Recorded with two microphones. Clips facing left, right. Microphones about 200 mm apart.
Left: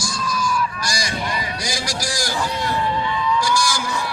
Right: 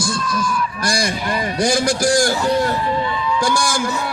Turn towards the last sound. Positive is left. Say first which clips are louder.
# right 2 dB
turn(degrees=-55)  # may be behind; listen again after turning